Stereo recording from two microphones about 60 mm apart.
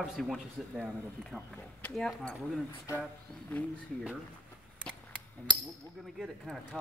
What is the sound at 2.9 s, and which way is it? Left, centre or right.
Speech, left.